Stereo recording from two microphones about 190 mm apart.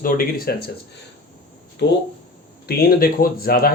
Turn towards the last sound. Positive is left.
turn(degrees=50)  # may be behind; listen again after turning